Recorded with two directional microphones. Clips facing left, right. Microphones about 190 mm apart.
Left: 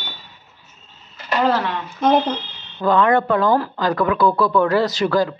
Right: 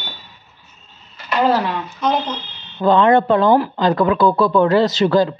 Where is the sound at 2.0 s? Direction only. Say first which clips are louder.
Left 4 dB; 55° left (ahead or behind).